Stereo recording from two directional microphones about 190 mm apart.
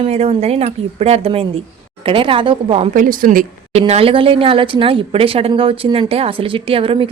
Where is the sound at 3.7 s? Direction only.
35° right (ahead or behind).